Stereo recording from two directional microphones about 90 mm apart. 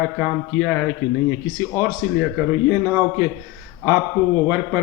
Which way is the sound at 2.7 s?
30° right (ahead or behind).